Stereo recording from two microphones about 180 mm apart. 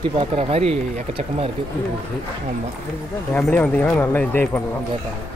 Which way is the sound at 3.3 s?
10° left (ahead or behind).